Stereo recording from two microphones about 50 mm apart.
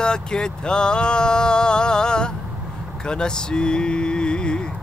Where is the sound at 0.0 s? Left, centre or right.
Centre.